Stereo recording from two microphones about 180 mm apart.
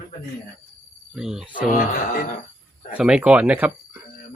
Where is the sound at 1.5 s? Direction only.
50° left (ahead or behind).